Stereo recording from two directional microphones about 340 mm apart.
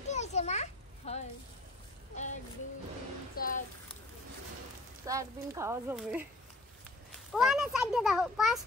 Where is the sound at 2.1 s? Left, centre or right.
Left.